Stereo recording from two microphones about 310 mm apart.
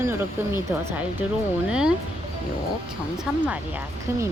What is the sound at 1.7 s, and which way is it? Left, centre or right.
Speech, centre.